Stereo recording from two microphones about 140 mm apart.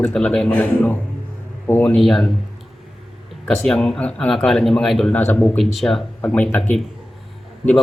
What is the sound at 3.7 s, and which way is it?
Speech, centre (ahead or behind).